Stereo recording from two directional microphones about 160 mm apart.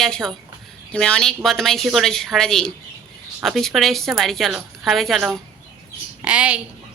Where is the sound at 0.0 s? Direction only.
Centre (ahead or behind).